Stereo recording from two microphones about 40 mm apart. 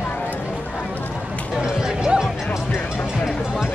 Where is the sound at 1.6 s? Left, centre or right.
Centre.